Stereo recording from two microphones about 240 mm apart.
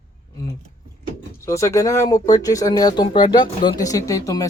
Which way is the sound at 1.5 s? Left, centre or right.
Centre.